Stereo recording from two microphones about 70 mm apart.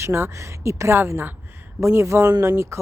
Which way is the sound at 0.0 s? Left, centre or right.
Right.